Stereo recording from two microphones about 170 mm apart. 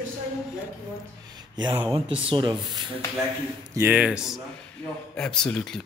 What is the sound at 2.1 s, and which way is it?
Speech, 30° right (ahead or behind).